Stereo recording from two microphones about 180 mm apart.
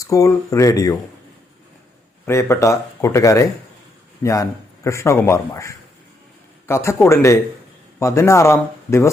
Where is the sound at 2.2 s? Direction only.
15° left (ahead or behind).